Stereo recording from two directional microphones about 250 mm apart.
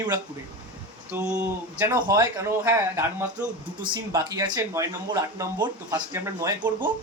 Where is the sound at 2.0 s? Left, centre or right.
Centre.